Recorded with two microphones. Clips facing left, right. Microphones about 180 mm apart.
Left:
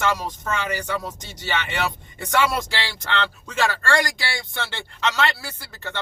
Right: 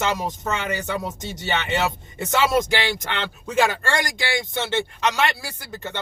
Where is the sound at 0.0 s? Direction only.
20° right (ahead or behind).